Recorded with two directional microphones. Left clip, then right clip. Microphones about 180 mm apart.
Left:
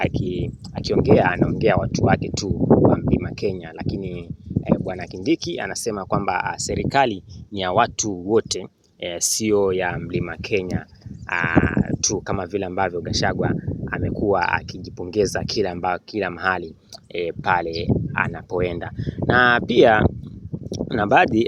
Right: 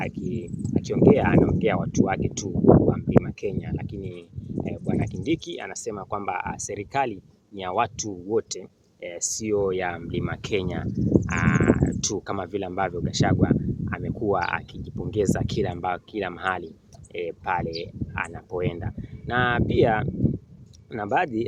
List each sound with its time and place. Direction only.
0.0 s speech: 45° left (ahead or behind)
9.6 s speech: 25° left (ahead or behind)
10.2 s speech: 15° left (ahead or behind)
11.3 s speech: 30° left (ahead or behind)
17.2 s speech: 45° left (ahead or behind)